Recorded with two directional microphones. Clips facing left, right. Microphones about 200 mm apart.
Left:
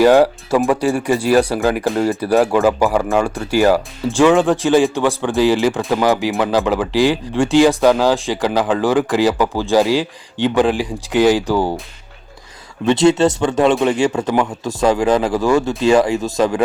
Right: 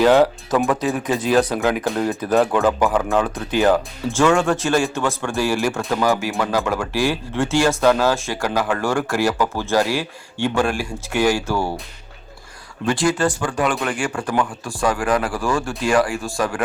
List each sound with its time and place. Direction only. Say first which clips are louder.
0.0 s speech: left 3 dB; 10° left (ahead or behind)
12.8 s speech: left 6 dB; 25° left (ahead or behind)